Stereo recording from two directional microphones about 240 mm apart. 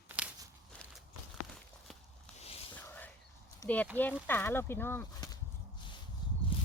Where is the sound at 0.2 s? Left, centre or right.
Centre.